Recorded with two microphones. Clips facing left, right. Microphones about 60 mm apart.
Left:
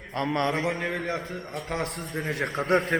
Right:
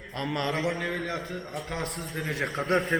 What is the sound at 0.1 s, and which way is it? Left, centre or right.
A man's voice, left.